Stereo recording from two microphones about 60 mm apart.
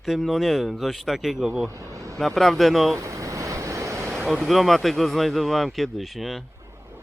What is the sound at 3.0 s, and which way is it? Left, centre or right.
Vehicle, right.